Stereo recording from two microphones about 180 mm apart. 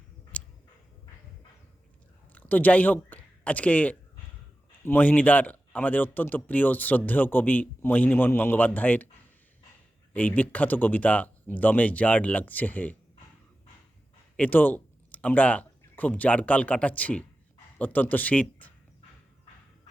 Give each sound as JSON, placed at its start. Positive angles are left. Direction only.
{"t": 0.3, "sound": "a sound", "side_deg": 10}
{"t": 2.3, "sound": "speech", "side_deg": 10}
{"t": 10.1, "sound": "speech", "side_deg": 10}
{"t": 14.3, "sound": "speech", "side_deg": 10}